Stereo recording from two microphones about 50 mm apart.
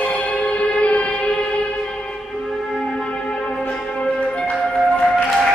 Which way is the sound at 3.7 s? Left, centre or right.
Centre.